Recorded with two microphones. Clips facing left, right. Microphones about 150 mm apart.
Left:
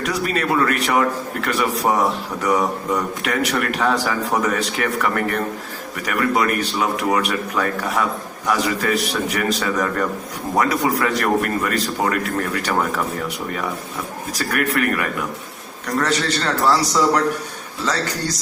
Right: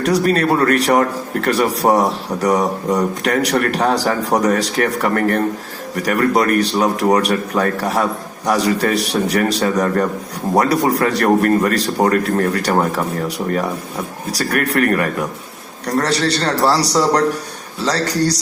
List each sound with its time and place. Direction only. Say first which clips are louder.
0.0 s speech: right 7 dB; 40° right (ahead or behind)